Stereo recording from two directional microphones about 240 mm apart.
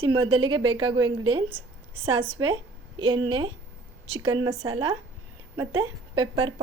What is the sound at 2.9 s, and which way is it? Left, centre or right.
A woman's voice, right.